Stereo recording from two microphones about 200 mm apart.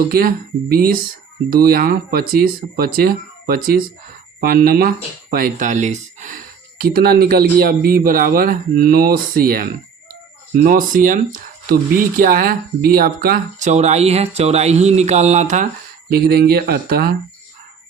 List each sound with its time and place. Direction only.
0.1 s speech: 45° right (ahead or behind)
16.0 s speech: 50° right (ahead or behind)